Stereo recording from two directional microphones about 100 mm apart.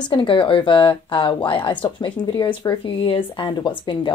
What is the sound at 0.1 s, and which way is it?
Speech, 60° left (ahead or behind).